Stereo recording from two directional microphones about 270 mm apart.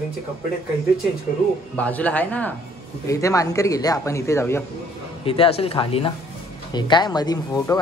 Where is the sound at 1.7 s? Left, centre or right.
Centre.